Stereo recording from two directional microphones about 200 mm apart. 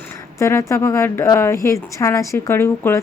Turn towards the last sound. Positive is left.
turn(degrees=10)  # may be behind; listen again after turning